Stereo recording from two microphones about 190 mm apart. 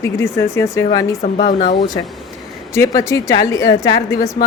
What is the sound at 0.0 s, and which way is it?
Speech, 15° left (ahead or behind).